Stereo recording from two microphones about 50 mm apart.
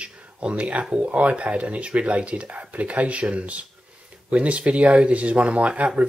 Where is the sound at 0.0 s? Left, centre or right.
Right.